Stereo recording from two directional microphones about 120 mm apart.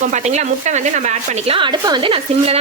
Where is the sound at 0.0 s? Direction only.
80° right.